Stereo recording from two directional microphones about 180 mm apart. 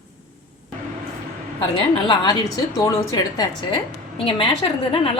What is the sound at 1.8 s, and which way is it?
A woman's voice, 25° left (ahead or behind).